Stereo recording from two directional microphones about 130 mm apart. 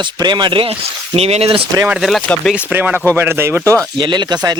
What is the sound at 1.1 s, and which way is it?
Speech, 55° right (ahead or behind).